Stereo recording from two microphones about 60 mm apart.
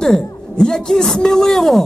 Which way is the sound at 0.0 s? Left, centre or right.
Centre.